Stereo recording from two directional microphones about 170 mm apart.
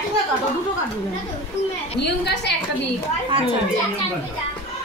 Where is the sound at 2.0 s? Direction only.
80° left.